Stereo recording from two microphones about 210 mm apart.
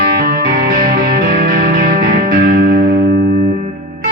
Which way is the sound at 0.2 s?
50° right (ahead or behind).